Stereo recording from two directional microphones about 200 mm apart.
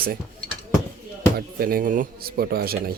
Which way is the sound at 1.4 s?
50° right (ahead or behind).